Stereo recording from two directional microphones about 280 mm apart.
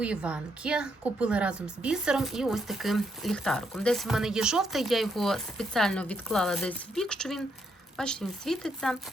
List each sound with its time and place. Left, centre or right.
0.0 s a woman's voice: centre